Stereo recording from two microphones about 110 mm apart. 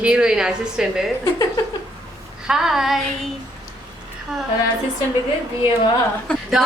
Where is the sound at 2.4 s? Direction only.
5° right (ahead or behind).